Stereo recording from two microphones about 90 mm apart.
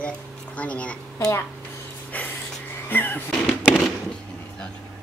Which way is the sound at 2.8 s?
25° left (ahead or behind).